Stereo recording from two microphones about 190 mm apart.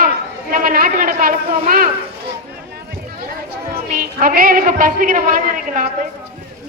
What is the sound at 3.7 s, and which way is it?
A woman's voice, 45° right (ahead or behind).